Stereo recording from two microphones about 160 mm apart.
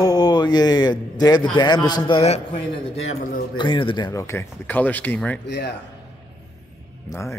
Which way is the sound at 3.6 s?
30° left (ahead or behind).